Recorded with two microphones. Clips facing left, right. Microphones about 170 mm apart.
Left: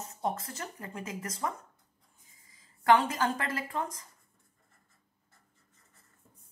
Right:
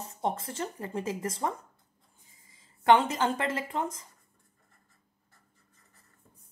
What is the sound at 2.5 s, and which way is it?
A woman's voice, 25° right (ahead or behind).